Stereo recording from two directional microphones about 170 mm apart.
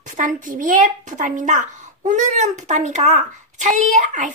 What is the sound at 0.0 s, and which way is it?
Speech, 50° right (ahead or behind).